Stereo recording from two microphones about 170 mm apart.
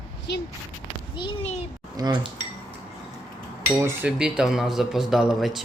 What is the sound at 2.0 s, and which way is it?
Cutlery, 25° right (ahead or behind).